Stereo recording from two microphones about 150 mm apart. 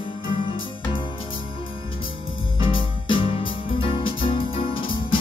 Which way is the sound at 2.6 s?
35° left (ahead or behind).